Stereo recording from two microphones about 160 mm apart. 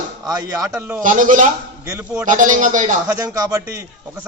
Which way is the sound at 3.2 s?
20° right (ahead or behind).